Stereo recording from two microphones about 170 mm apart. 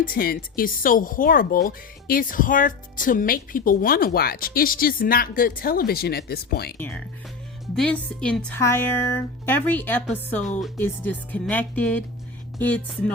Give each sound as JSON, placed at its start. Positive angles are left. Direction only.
{"t": 0.0, "sound": "speech", "side_deg": 60}
{"t": 6.7, "sound": "a woman's voice", "side_deg": 10}